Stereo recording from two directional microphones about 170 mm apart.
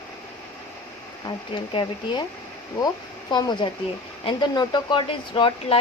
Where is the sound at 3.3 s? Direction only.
25° left (ahead or behind).